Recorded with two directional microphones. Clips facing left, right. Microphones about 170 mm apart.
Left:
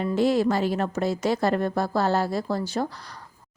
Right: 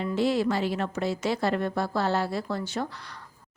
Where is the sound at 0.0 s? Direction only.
45° left (ahead or behind).